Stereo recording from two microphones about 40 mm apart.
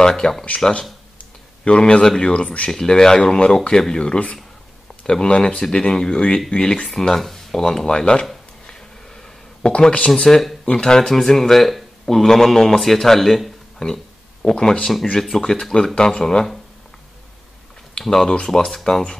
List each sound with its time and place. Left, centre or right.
0.0 s speech: centre
1.6 s speech: left
2.7 s speech: centre
3.2 s speech: left
7.0 s speech: centre
8.6 s a sound: centre
9.7 s speech: left
10.1 s speech: centre
13.7 s a sound: centre
14.5 s speech: centre
18.0 s speech: centre